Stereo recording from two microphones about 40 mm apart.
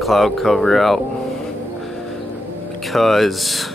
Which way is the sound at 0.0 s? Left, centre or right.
Centre.